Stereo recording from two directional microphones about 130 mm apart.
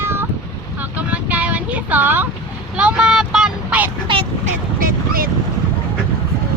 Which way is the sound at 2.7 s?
5° right (ahead or behind).